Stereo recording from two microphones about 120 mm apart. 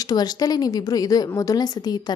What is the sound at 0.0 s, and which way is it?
Speech, 35° left (ahead or behind).